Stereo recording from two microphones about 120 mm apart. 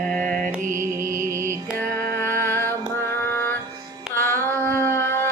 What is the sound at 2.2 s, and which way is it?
Music, 20° left (ahead or behind).